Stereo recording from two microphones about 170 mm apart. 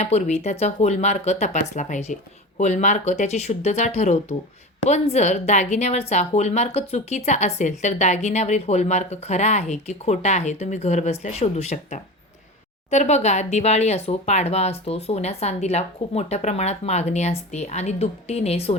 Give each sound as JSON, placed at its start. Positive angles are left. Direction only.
{"t": 0.0, "sound": "speech", "side_deg": 40}